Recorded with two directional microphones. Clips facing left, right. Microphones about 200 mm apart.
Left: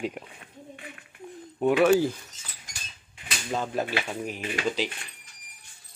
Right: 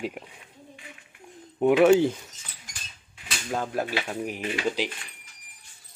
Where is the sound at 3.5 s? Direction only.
10° right (ahead or behind).